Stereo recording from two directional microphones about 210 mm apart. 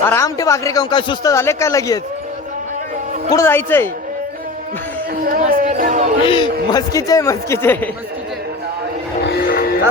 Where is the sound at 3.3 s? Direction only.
10° left (ahead or behind).